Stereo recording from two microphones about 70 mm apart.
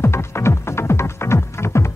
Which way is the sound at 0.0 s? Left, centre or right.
Left.